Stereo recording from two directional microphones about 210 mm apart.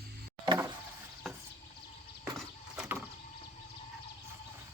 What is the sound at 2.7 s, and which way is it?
Vehicle, 5° right (ahead or behind).